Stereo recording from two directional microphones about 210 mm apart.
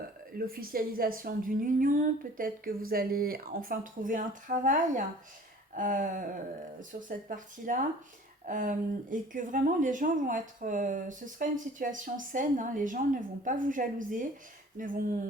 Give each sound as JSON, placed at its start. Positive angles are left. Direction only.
{"t": 0.3, "sound": "a woman's voice", "side_deg": -45}